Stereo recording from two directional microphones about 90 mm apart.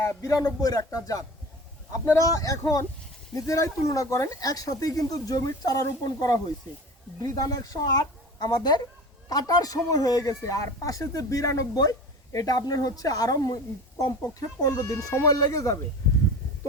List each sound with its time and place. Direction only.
0.0 s a man's voice: 35° left (ahead or behind)